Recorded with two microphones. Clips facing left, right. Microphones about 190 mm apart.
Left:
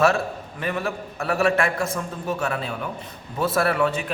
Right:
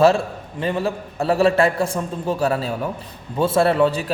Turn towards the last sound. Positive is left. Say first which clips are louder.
# right 5 dB
turn(degrees=-30)  # may be behind; listen again after turning